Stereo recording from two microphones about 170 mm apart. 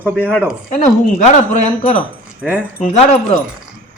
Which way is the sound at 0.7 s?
45° left (ahead or behind).